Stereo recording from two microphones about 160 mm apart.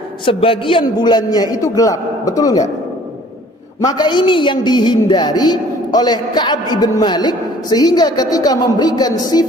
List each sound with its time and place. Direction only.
0.3 s a woman's voice: 35° left (ahead or behind)
3.8 s a woman's voice: 25° left (ahead or behind)